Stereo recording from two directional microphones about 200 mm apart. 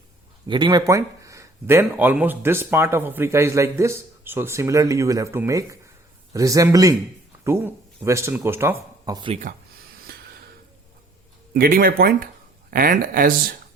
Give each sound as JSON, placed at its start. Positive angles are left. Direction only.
{"t": 0.4, "sound": "speech", "side_deg": -20}
{"t": 11.5, "sound": "speech", "side_deg": -45}